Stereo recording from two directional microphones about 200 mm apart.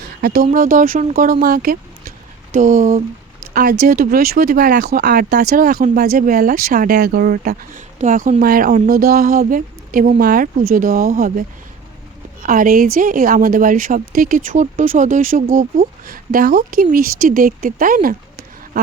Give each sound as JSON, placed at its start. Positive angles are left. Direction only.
{"t": 0.2, "sound": "speech", "side_deg": -50}